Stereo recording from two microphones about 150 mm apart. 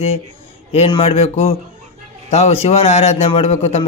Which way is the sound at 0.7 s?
40° left (ahead or behind).